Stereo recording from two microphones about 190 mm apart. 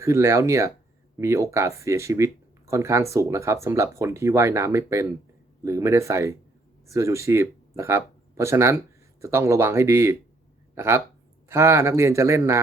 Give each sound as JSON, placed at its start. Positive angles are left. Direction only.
{"t": 0.0, "sound": "speech", "side_deg": -15}